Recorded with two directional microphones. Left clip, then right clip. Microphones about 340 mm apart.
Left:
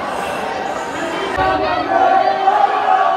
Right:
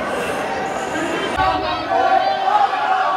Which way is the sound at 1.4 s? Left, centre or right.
Centre.